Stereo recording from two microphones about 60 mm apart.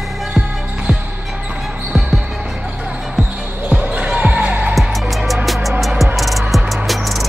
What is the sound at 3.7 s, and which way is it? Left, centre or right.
Basketball bounce, right.